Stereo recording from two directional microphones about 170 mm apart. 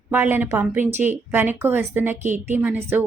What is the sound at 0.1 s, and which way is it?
A woman's voice, 10° right (ahead or behind).